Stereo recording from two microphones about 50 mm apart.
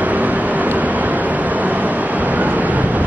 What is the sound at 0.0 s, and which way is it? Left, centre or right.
Vehicle, right.